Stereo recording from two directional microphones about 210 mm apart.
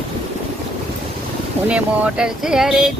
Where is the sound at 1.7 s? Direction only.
5° right (ahead or behind).